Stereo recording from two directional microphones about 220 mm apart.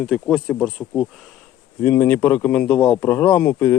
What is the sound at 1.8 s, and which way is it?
A man's voice, 10° left (ahead or behind).